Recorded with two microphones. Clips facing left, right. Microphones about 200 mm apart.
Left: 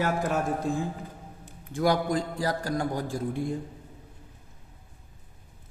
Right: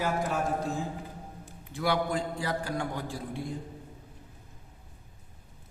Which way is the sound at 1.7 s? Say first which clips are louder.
Left 4 dB; 40° left (ahead or behind).